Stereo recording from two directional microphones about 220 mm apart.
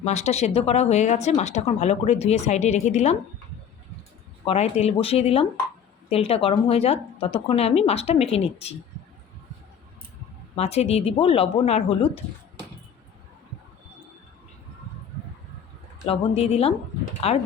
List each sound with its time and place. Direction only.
0.0 s speech: 30° left (ahead or behind)
4.4 s a woman's voice: 30° left (ahead or behind)
10.5 s a woman's voice: 30° left (ahead or behind)
16.0 s a woman's voice: 25° left (ahead or behind)